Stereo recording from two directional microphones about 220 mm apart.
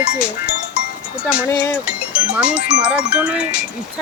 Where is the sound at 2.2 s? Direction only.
5° right (ahead or behind).